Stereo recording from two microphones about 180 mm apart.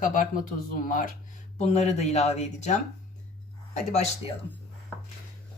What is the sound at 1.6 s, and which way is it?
Speech, 40° left (ahead or behind).